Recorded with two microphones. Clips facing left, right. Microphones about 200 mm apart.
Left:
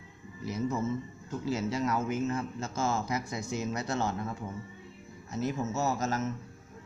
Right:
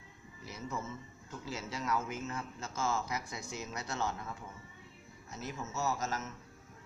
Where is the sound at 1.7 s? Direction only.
45° left (ahead or behind).